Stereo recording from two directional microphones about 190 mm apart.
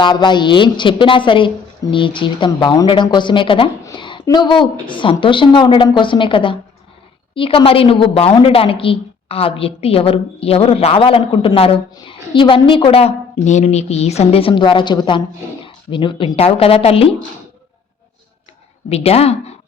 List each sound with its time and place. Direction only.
0.0 s a woman's voice: 25° left (ahead or behind)
18.9 s speech: 30° left (ahead or behind)